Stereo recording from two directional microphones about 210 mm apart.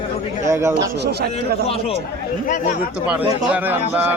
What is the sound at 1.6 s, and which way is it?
Speech, 30° left (ahead or behind).